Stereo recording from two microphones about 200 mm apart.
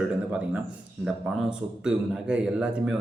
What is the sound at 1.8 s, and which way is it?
Speech, 5° right (ahead or behind).